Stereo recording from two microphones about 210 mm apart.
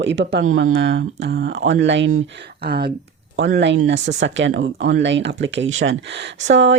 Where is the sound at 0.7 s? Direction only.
50° right (ahead or behind).